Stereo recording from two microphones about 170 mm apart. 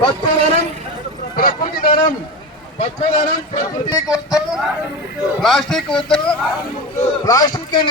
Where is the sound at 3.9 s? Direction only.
20° left (ahead or behind).